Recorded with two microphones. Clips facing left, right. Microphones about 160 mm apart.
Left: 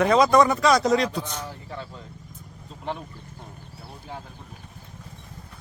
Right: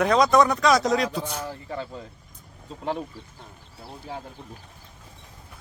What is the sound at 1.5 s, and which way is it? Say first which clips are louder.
Speech: right 4 dB; 35° right (ahead or behind).